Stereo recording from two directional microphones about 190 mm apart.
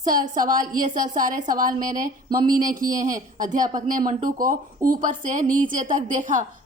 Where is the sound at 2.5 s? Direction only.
45° right (ahead or behind).